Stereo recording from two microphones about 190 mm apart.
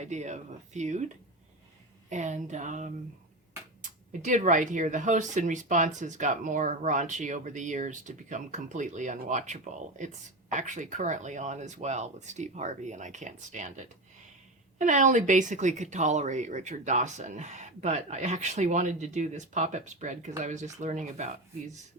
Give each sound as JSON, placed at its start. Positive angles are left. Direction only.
{"t": 0.0, "sound": "speech", "side_deg": -40}